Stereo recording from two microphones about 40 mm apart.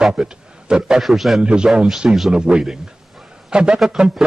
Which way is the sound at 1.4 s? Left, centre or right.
Right.